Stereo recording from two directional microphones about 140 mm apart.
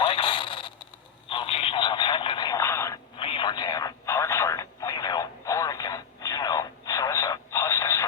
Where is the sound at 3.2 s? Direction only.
40° left (ahead or behind).